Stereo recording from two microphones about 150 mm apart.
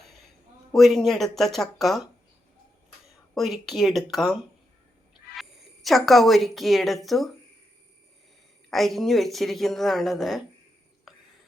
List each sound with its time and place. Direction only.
0.7 s speech: centre (ahead or behind)
3.1 s speech: centre (ahead or behind)
5.3 s speech: centre (ahead or behind)
8.7 s speech: centre (ahead or behind)
11.1 s whispering: centre (ahead or behind)